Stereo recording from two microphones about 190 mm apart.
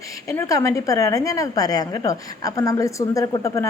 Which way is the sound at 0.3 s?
15° left (ahead or behind).